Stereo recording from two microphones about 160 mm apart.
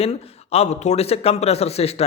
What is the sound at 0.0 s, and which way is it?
Speech, 40° left (ahead or behind).